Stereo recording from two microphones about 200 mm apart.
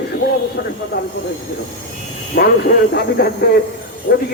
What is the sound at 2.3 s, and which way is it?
Speech, 45° left (ahead or behind).